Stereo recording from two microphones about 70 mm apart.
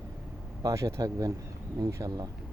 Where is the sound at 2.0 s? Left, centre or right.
Right.